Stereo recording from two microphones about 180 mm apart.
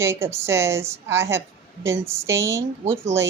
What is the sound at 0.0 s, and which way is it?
A woman's voice, 15° right (ahead or behind).